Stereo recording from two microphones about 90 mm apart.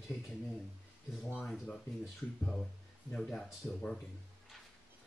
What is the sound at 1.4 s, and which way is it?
Speech, centre (ahead or behind).